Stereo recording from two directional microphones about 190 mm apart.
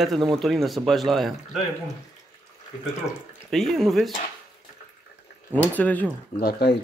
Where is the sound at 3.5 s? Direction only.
Centre (ahead or behind).